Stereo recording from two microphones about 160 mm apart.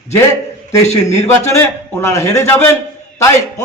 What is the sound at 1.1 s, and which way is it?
A man's voice, 15° left (ahead or behind).